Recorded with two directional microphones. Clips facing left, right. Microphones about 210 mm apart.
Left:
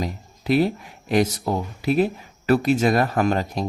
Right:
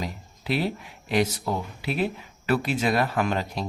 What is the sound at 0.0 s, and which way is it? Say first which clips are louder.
Speech: left 5 dB; 45° left (ahead or behind).